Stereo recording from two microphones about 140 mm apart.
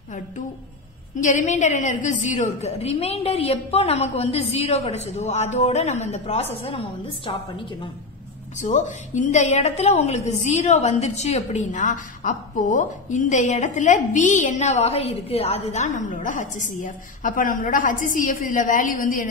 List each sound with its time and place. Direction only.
1.2 s a woman's voice: 60° left (ahead or behind); by 7.9 s 35° left (ahead or behind)
8.6 s a woman's voice: 60° left (ahead or behind)